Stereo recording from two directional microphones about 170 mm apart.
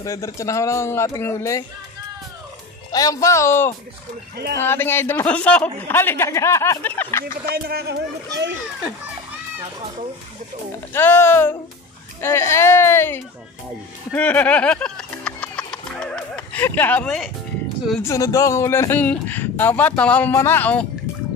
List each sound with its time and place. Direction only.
0.0 s speech: 20° left (ahead or behind)
2.9 s speech: 20° left (ahead or behind)
7.2 s speech: 65° right (ahead or behind)
10.9 s speech: 15° left (ahead or behind)
14.1 s music: 10° left (ahead or behind)
18.0 s speech: 20° left (ahead or behind)